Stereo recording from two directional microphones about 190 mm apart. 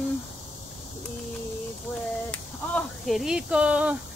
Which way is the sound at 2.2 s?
5° left (ahead or behind).